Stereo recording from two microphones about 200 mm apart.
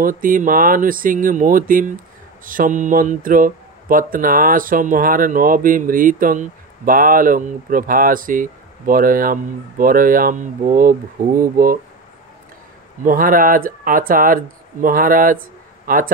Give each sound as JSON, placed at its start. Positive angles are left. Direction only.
{"t": 0.0, "sound": "speech", "side_deg": -45}
{"t": 13.0, "sound": "speech", "side_deg": -45}